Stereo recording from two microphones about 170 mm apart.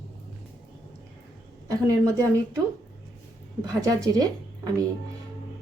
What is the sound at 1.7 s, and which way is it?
Speech, 20° right (ahead or behind).